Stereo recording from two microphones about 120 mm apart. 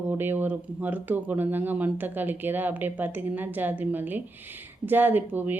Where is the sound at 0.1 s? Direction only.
15° right (ahead or behind).